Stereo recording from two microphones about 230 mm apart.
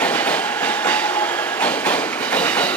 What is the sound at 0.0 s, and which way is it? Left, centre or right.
Train, centre.